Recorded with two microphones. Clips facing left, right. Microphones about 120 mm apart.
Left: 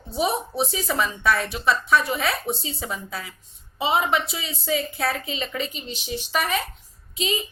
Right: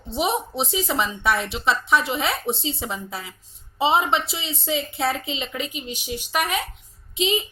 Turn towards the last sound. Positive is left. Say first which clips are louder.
# right 4 dB
turn(degrees=-25)  # may be behind; listen again after turning